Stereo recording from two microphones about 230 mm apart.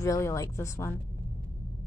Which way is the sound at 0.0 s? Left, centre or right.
Centre.